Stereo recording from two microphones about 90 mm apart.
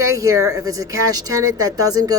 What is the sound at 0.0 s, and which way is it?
Speech, 35° right (ahead or behind).